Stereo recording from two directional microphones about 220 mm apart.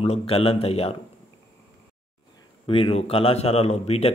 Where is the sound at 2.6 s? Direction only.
25° left (ahead or behind).